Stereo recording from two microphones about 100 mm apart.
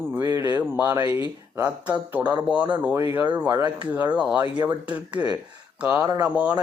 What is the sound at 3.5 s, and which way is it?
Speech, 45° right (ahead or behind).